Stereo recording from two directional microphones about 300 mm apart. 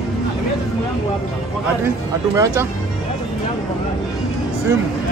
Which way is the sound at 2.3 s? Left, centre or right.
Centre.